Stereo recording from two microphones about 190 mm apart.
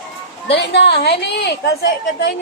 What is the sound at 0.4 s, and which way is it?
A woman's voice, 65° left (ahead or behind).